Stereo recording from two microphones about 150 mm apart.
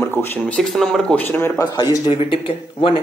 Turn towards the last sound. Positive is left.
turn(degrees=35)  # may be behind; listen again after turning